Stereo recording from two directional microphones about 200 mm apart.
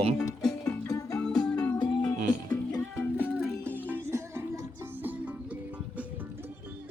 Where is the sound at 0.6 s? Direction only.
15° left (ahead or behind).